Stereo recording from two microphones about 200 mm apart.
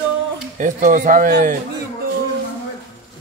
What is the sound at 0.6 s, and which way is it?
Speech, 40° right (ahead or behind).